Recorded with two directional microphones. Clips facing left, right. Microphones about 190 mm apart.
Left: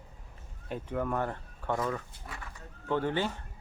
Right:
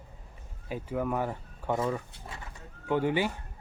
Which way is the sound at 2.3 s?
25° right (ahead or behind).